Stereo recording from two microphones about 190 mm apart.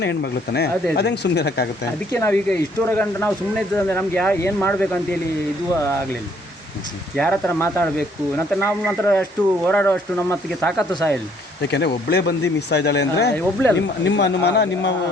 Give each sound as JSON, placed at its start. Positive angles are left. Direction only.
{"t": 0.0, "sound": "speech", "side_deg": 60}
{"t": 2.1, "sound": "speech", "side_deg": 10}
{"t": 7.2, "sound": "speech", "side_deg": 10}
{"t": 11.7, "sound": "speech", "side_deg": 60}
{"t": 13.3, "sound": "speech", "side_deg": 10}
{"t": 13.7, "sound": "speech", "side_deg": 65}